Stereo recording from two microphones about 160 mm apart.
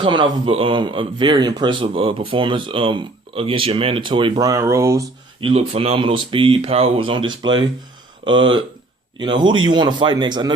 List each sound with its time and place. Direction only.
0.0 s speech: 30° right (ahead or behind)
5.4 s speech: 35° right (ahead or behind)